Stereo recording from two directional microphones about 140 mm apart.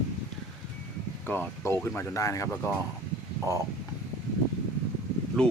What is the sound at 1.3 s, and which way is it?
Speech, 15° left (ahead or behind).